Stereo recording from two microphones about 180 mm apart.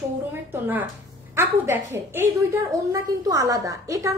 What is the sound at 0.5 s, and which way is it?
A woman's voice, 10° right (ahead or behind).